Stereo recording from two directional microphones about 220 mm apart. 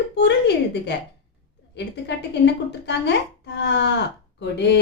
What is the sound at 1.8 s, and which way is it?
A woman's voice, 50° left (ahead or behind).